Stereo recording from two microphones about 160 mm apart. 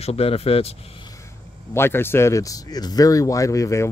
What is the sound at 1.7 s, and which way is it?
Speech, 15° left (ahead or behind).